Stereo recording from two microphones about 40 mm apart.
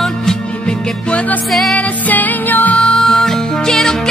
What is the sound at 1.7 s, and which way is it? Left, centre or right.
Music, left.